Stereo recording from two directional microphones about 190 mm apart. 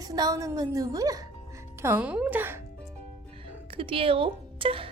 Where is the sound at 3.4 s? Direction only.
30° right (ahead or behind).